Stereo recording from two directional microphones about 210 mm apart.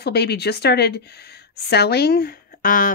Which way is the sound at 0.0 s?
50° left (ahead or behind).